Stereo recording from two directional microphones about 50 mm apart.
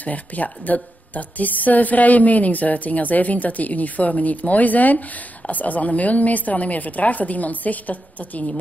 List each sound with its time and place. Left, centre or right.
0.0 s a woman's voice: left